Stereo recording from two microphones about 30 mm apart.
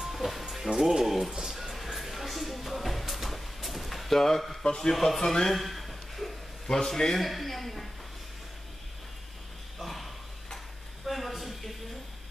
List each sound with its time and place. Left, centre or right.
0.1 s music: centre
0.7 s speech: centre
1.4 s music: centre
4.6 s speech: left
5.5 s a sound: centre
6.7 s speech: centre
7.2 s speech: centre
9.8 s a sound: centre